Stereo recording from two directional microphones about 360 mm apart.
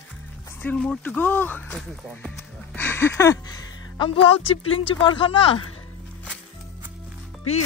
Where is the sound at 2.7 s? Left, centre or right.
Centre.